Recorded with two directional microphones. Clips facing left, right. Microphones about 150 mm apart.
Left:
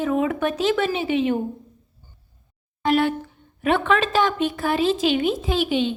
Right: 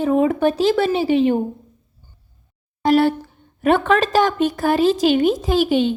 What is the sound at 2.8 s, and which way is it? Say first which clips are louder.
A woman's voice: right 5 dB; 35° right (ahead or behind).